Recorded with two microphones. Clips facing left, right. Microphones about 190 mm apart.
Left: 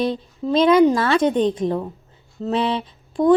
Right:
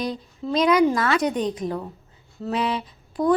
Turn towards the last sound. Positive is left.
turn(degrees=25)  # may be behind; listen again after turning